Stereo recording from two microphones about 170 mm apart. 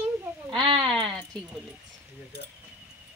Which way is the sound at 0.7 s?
Centre (ahead or behind).